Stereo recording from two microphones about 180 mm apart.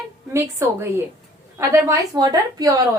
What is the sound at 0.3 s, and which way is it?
A woman's voice, 15° right (ahead or behind).